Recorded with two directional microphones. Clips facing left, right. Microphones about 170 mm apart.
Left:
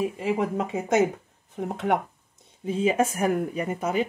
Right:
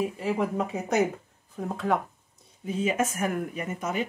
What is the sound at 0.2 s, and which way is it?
Speech, 30° left (ahead or behind).